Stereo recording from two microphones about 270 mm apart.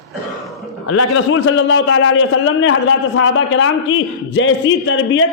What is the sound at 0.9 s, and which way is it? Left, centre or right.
Speech, left.